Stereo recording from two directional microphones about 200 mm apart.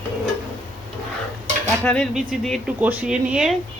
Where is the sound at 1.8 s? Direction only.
5° left (ahead or behind).